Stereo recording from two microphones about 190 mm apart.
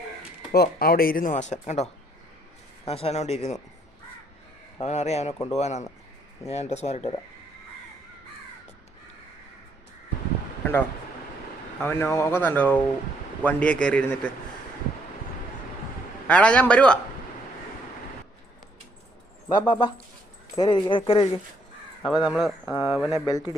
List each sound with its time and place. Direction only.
0.5 s speech: 55° left (ahead or behind); by 3.6 s 35° left (ahead or behind)
4.8 s speech: 35° left (ahead or behind)
11.8 s speech: 10° left (ahead or behind)
16.2 s speech: 5° left (ahead or behind)
19.6 s speech: 25° left (ahead or behind)
22.0 s speech: 5° right (ahead or behind)
22.7 s speech: 25° left (ahead or behind)
23.0 s speech: centre (ahead or behind)
23.2 s speech: 20° left (ahead or behind)